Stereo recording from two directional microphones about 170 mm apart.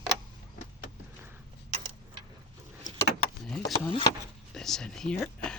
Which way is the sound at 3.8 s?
30° left (ahead or behind).